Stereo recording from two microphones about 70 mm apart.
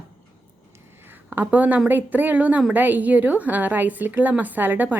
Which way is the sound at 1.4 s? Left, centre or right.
Right.